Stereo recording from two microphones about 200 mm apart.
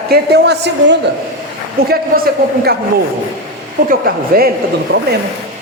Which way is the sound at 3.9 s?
50° right (ahead or behind).